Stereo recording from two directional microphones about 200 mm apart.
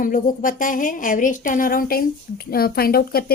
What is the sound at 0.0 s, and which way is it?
A woman's voice, 45° left (ahead or behind).